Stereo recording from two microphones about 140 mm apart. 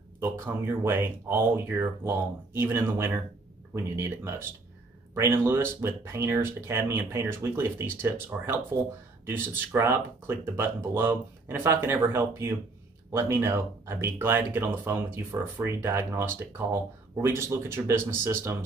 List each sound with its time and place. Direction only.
0.2 s speech: 15° right (ahead or behind)